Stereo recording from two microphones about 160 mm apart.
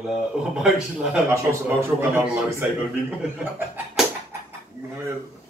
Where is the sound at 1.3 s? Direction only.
15° right (ahead or behind).